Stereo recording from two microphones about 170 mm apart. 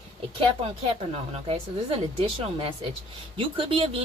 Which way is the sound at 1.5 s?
35° right (ahead or behind).